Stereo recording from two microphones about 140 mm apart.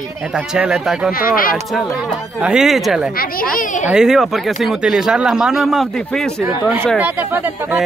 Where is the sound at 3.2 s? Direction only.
90° left; by 3.9 s 65° left (ahead or behind).